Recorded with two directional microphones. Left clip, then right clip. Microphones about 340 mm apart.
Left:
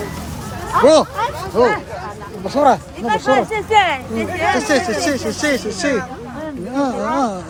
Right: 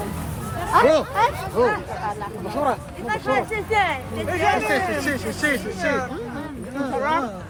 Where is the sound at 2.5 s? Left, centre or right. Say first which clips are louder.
Left 10 dB; left.